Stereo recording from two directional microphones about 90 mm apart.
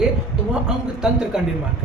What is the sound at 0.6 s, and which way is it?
Speech, 10° right (ahead or behind).